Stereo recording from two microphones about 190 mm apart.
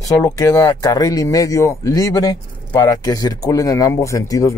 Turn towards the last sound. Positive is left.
turn(degrees=15)  # may be behind; listen again after turning